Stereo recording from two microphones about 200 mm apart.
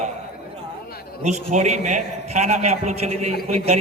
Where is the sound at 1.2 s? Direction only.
35° right (ahead or behind).